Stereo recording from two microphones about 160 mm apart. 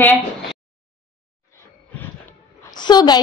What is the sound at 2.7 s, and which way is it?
Speech, 25° left (ahead or behind).